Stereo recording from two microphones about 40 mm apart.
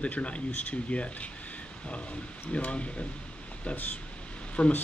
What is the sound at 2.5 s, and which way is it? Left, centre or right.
Speech, left.